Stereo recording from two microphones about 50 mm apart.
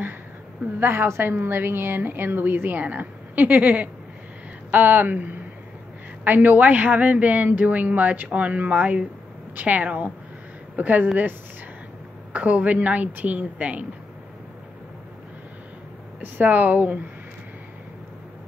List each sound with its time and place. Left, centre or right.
0.7 s a woman's voice: right
12.3 s a woman's voice: right
16.2 s a woman's voice: right